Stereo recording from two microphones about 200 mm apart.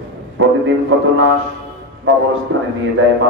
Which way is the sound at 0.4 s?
75° right (ahead or behind).